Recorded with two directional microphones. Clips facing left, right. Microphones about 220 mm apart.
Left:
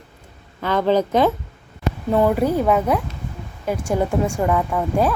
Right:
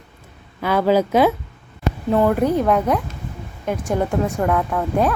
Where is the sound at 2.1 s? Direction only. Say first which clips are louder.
Right 1 dB; 5° left (ahead or behind).